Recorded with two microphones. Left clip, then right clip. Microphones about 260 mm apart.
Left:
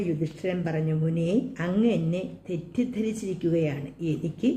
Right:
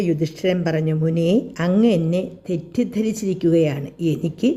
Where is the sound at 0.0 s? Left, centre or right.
Right.